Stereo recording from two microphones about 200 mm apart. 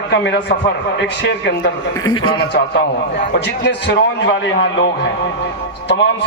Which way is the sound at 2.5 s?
60° left (ahead or behind).